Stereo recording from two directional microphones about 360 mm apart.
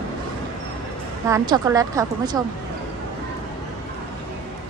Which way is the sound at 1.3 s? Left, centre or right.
Centre.